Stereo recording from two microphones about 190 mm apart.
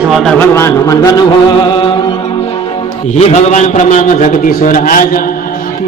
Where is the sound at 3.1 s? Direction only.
35° left (ahead or behind).